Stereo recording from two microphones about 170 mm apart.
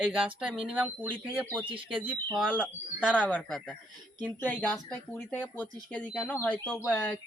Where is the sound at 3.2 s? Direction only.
5° left (ahead or behind).